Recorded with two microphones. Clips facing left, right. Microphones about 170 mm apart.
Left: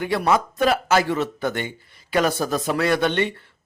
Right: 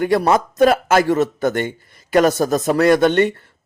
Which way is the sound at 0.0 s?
45° right (ahead or behind).